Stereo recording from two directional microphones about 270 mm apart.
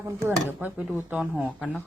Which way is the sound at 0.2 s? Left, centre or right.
Centre.